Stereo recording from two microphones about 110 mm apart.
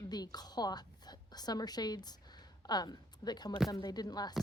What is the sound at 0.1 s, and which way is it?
A woman's voice, 40° left (ahead or behind).